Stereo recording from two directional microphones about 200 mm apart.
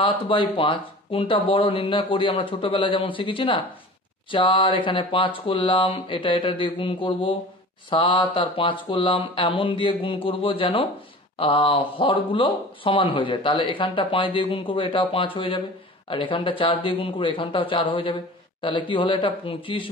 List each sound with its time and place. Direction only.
0.0 s speech: 25° left (ahead or behind)